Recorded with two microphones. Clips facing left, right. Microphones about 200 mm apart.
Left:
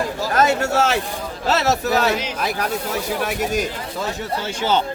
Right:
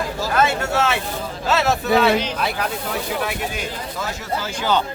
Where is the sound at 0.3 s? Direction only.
40° left (ahead or behind).